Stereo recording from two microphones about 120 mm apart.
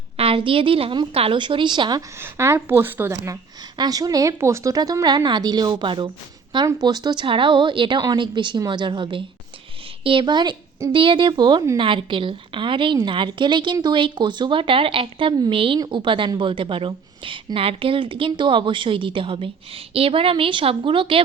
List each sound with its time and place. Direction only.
0.2 s a woman's voice: 50° right (ahead or behind)
2.2 s a woman's voice: 20° right (ahead or behind); by 21.2 s 45° right (ahead or behind)